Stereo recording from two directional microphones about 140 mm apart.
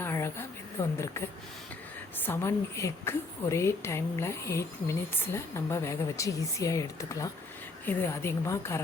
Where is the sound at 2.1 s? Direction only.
15° left (ahead or behind).